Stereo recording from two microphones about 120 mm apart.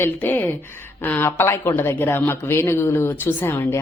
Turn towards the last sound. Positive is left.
turn(degrees=20)  # may be behind; listen again after turning